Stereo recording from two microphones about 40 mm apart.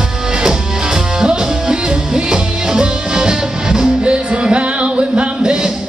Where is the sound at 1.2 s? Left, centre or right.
Right.